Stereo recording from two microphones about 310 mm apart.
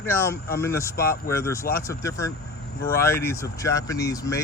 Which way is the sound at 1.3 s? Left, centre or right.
Centre.